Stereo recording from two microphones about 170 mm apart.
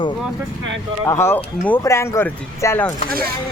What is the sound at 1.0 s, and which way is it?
Speech, 15° left (ahead or behind).